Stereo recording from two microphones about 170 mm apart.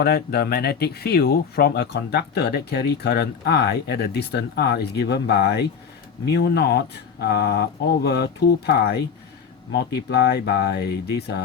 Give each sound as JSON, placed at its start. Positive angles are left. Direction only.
{"t": 0.0, "sound": "speech", "side_deg": 65}